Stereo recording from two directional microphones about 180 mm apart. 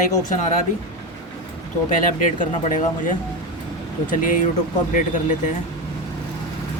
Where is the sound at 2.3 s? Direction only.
45° left (ahead or behind).